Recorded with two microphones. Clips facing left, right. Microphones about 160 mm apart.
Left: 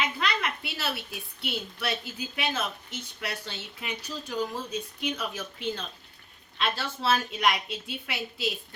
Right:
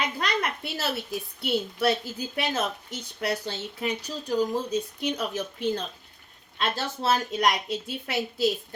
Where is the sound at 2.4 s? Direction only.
40° right (ahead or behind).